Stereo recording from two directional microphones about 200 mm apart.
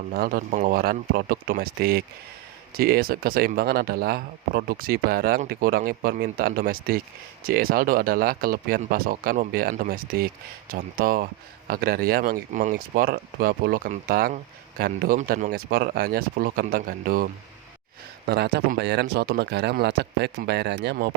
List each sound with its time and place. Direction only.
0.1 s speech: 45° right (ahead or behind)
18.3 s speech: 55° right (ahead or behind)